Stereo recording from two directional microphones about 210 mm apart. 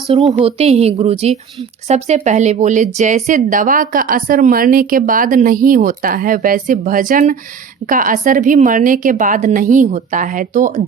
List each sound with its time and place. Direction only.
0.1 s a woman's voice: 20° right (ahead or behind); by 10.8 s 35° right (ahead or behind)